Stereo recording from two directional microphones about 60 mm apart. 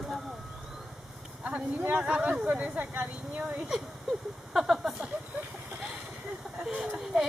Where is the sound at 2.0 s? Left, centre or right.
Centre.